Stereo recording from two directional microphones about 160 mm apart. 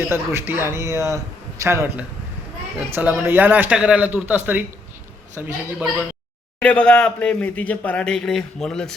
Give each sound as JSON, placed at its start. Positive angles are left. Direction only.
{"t": 0.1, "sound": "a man's voice", "side_deg": -15}
{"t": 6.6, "sound": "speech", "side_deg": 5}